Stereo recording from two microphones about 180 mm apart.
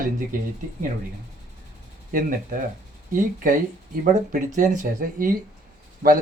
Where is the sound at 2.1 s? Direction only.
50° right (ahead or behind).